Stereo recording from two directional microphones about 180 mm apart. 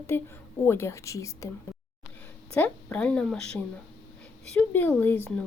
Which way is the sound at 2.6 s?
5° left (ahead or behind).